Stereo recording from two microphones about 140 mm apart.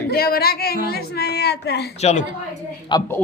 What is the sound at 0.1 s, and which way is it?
Speech, 90° left.